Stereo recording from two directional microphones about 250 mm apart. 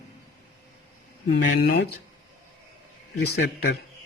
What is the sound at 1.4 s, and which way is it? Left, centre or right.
Speech, left.